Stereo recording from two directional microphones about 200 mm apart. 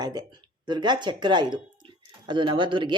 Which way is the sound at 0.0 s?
20° right (ahead or behind).